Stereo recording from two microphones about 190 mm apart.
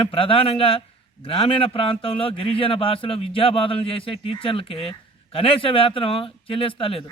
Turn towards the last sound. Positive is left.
turn(degrees=30)  # may be behind; listen again after turning